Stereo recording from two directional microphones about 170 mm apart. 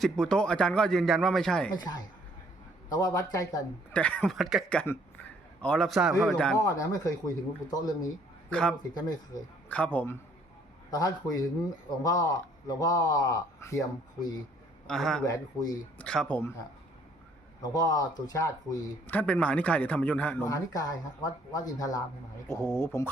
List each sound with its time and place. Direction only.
0.0 s a man's voice: 5° left (ahead or behind)
2.9 s a man's voice: 20° left (ahead or behind)
3.9 s a man's voice: 5° left (ahead or behind)
6.6 s a man's voice: 20° left (ahead or behind)
8.4 s a man's voice: 5° left (ahead or behind)
9.0 s a man's voice: 20° left (ahead or behind)
9.6 s speech: 10° left (ahead or behind)
10.9 s a man's voice: 20° left (ahead or behind)
14.8 s a man's voice: 5° left (ahead or behind)
17.6 s speech: 20° left (ahead or behind)